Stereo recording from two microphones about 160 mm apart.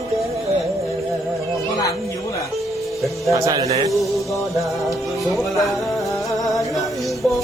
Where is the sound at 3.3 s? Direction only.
20° right (ahead or behind).